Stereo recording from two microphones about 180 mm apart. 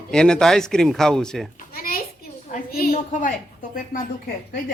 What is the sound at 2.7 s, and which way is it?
Speech, 50° left (ahead or behind).